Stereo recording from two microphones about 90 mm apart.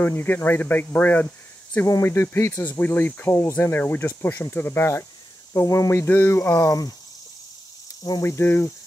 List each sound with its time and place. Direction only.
0.0 s speech: 20° left (ahead or behind)
1.9 s speech: 30° left (ahead or behind)
8.2 s speech: 30° left (ahead or behind)